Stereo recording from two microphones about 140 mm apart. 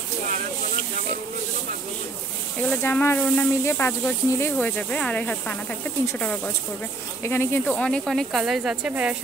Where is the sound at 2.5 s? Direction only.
10° left (ahead or behind).